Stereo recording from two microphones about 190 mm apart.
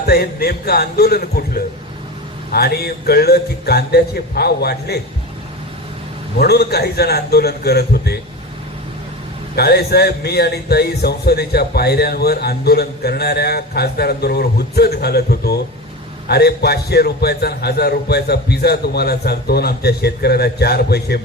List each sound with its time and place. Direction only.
0.0 s speech: 55° left (ahead or behind)
2.5 s speech: 55° left (ahead or behind)
6.4 s speech: 55° left (ahead or behind)
9.6 s speech: 55° left (ahead or behind)